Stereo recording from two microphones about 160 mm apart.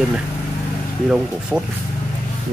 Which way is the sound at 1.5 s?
Centre (ahead or behind).